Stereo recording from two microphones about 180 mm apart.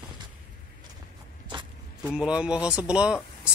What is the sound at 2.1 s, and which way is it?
Speech, 5° right (ahead or behind).